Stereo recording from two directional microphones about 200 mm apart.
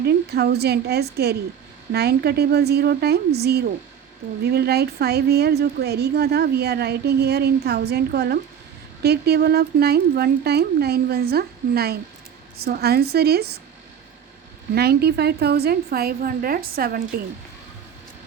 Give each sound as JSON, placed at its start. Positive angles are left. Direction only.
{"t": 0.0, "sound": "a woman's voice", "side_deg": -55}
{"t": 14.8, "sound": "a woman's voice", "side_deg": -50}